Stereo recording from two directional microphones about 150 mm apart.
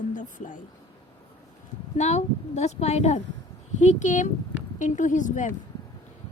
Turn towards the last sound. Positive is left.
turn(degrees=55)  # may be behind; listen again after turning